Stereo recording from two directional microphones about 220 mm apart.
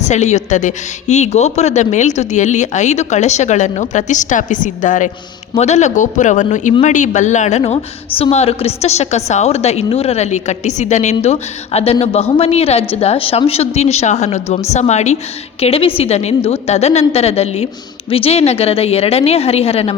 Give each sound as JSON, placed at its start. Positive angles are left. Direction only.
{"t": 0.0, "sound": "a woman's voice", "side_deg": 30}